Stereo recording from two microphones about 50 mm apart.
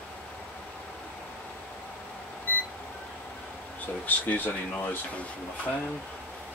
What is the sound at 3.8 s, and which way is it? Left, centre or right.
Speech, left.